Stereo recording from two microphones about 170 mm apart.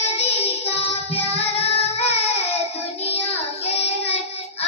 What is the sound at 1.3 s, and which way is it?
Child singing, 40° left (ahead or behind).